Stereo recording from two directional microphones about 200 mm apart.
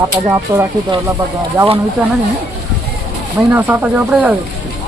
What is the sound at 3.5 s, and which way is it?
Speech, 10° right (ahead or behind).